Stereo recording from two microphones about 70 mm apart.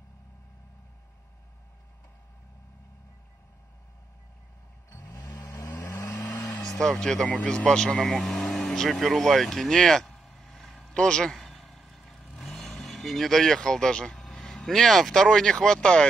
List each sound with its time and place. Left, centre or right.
5.1 s vehicle: left
6.0 s vehicle: left
6.6 s speech: centre
11.0 s vehicle: centre
12.7 s speech: centre